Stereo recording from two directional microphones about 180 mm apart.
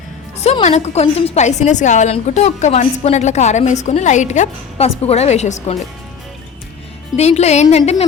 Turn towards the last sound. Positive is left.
turn(degrees=35)  # may be behind; listen again after turning